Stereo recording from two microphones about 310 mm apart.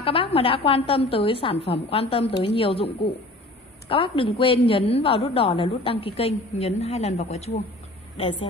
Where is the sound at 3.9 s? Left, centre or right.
Centre.